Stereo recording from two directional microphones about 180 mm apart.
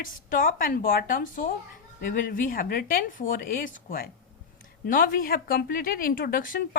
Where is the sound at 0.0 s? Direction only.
50° left (ahead or behind).